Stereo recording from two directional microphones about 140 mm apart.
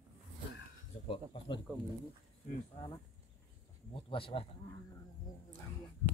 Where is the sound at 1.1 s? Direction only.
35° left (ahead or behind).